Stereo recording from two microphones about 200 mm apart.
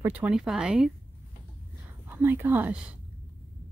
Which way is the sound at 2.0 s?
10° right (ahead or behind).